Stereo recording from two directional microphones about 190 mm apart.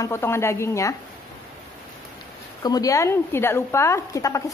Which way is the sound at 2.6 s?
20° left (ahead or behind).